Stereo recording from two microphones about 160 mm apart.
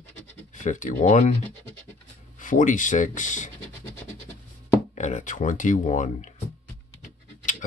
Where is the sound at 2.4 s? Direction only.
55° left (ahead or behind).